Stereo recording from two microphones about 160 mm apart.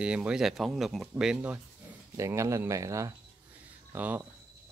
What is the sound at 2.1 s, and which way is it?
Speech, 20° right (ahead or behind).